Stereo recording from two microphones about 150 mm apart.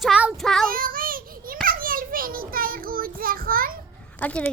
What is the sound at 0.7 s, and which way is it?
Children playing, 70° right (ahead or behind).